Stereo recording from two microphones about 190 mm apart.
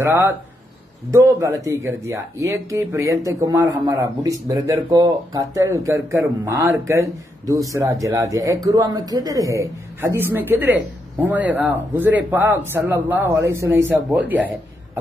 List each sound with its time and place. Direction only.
0.0 s speech: 15° right (ahead or behind)